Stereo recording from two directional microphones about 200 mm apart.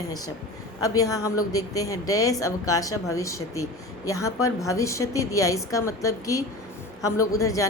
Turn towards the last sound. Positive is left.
turn(degrees=15)  # may be behind; listen again after turning